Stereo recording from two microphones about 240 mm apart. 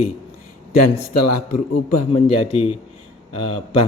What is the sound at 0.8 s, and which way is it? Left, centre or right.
Speech, left.